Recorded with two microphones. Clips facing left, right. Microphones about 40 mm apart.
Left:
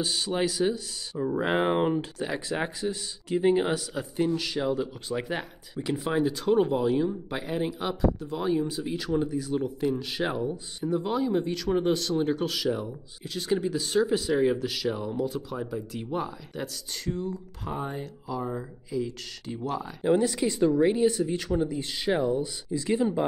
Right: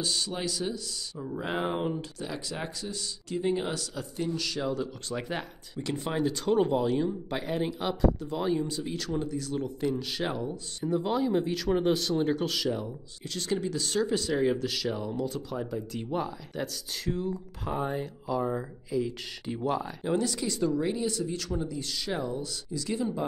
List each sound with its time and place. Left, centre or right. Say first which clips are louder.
0.0 s speech: left 4 dB; left; by 19.9 s centre
20.0 s speech: left 5 dB; centre